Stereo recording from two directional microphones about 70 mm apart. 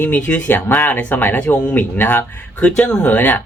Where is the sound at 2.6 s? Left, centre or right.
Centre.